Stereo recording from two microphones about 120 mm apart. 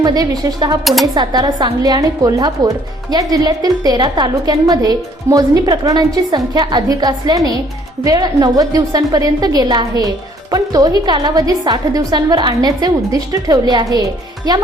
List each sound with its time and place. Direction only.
0.0 s a woman's voice: 30° right (ahead or behind)